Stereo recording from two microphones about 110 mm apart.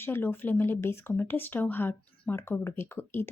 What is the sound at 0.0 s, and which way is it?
Speech, 20° left (ahead or behind).